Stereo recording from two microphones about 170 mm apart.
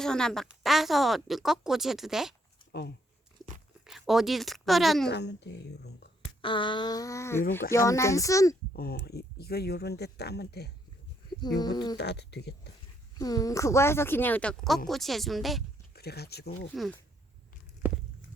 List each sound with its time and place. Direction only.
0.0 s a woman's voice: 5° left (ahead or behind)
3.8 s speech: centre (ahead or behind)
5.0 s speech: 90° left
6.4 s a sound: 30° left (ahead or behind)
7.7 s a woman's voice: 15° left (ahead or behind)
8.7 s speech: 65° left (ahead or behind)
11.3 s a sound: 25° left (ahead or behind)
11.9 s speech: 80° left
13.1 s a woman's voice: 20° left (ahead or behind); by 15.6 s centre (ahead or behind)
15.9 s speech: 70° left (ahead or behind)
16.7 s a woman's voice: centre (ahead or behind)